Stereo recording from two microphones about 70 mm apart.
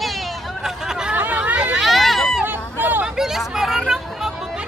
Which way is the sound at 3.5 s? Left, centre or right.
Centre.